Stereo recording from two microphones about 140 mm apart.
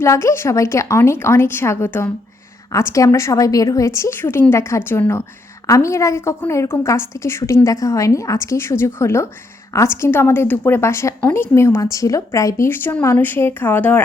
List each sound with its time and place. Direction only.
0.0 s a woman's voice: 20° left (ahead or behind)